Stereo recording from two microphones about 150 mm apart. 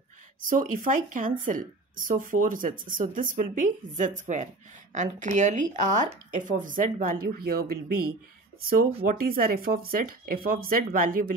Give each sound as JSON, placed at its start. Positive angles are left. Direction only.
{"t": 0.4, "sound": "speech", "side_deg": -60}
{"t": 9.0, "sound": "speech", "side_deg": -70}